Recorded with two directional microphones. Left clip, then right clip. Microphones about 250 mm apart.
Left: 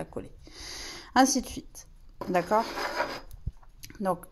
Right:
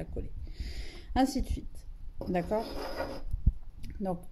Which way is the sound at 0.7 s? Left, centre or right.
Left.